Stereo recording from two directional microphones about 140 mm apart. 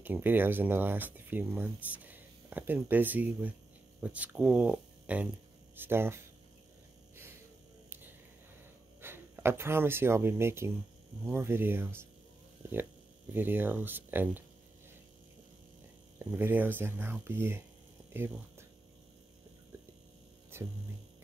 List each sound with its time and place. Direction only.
0.0 s speech: 15° right (ahead or behind)
9.0 s speech: 15° right (ahead or behind)
13.3 s speech: 15° right (ahead or behind)
16.2 s speech: 15° right (ahead or behind)
20.5 s music: 15° right (ahead or behind)